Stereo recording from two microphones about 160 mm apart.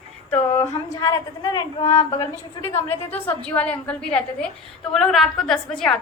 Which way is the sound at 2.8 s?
40° left (ahead or behind).